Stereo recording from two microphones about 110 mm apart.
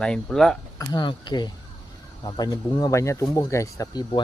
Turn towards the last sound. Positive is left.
turn(degrees=40)  # may be behind; listen again after turning